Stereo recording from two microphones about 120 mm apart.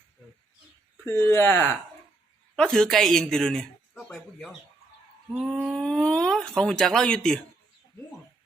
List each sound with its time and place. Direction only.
1.0 s speech: 20° left (ahead or behind)
2.6 s speech: 5° left (ahead or behind)